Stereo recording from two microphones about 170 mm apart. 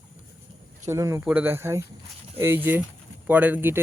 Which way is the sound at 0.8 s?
15° right (ahead or behind).